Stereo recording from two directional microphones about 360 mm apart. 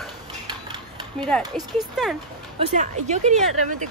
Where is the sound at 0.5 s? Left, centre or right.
Centre.